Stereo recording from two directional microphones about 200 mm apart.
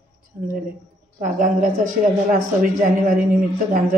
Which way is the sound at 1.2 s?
40° right (ahead or behind).